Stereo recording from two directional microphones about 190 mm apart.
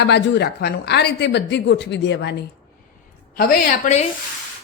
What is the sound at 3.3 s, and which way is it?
Speech, 50° left (ahead or behind).